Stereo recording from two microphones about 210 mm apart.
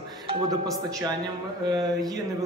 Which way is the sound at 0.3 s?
15° right (ahead or behind).